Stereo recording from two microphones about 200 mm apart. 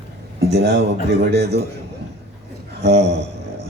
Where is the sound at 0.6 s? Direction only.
55° right (ahead or behind).